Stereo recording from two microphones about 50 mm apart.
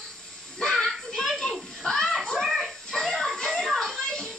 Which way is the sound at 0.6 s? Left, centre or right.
Centre.